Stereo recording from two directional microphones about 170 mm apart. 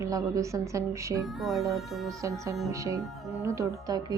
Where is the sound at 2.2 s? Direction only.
20° right (ahead or behind).